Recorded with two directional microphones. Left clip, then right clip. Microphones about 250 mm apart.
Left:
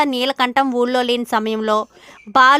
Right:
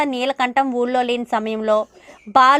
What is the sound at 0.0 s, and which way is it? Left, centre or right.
A woman's voice, centre.